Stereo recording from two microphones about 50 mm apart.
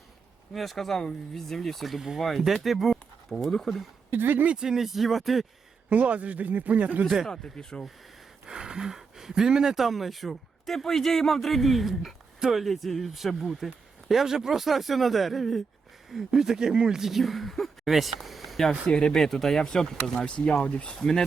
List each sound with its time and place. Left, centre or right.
0.5 s speech: centre
4.1 s speech: right
4.6 s speech: centre
5.9 s speech: right
7.0 s speech: centre
7.3 s speech: centre
8.4 s speech: centre
18.9 s speech: centre
20.2 s speech: left
21.0 s speech: centre